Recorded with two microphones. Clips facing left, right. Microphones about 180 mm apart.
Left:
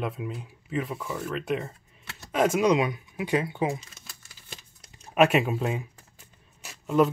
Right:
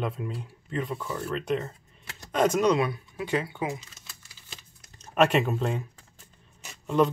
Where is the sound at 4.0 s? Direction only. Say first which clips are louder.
Left 1 dB; 50° left (ahead or behind).